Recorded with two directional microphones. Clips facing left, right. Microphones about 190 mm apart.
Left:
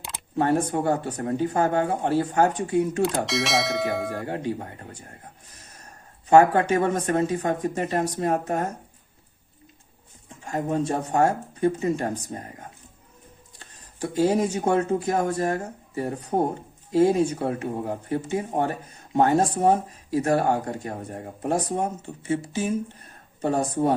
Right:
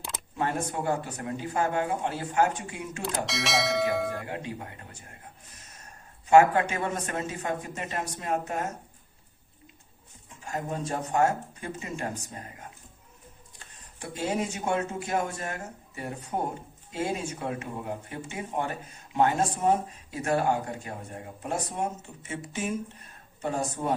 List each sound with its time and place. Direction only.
0.3 s speech: 35° left (ahead or behind)
3.2 s speech: centre (ahead or behind)
4.3 s speech: 35° left (ahead or behind)
6.3 s speech: 35° left (ahead or behind)
10.4 s speech: 30° left (ahead or behind)
14.0 s speech: 35° left (ahead or behind)